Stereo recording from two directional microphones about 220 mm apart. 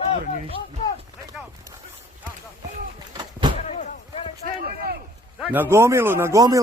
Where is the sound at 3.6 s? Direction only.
30° left (ahead or behind).